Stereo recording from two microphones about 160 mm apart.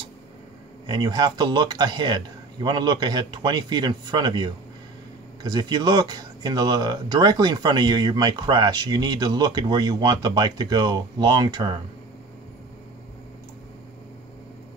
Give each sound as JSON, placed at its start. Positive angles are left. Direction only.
{"t": 0.8, "sound": "speech", "side_deg": -25}